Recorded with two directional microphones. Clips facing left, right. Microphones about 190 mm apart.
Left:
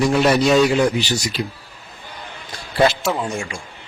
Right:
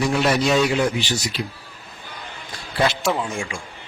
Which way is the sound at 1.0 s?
40° left (ahead or behind).